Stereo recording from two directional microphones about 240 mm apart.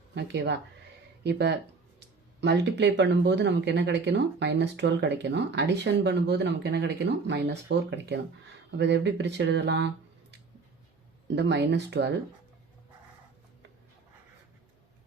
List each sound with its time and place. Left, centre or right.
0.1 s speech: right
11.3 s speech: right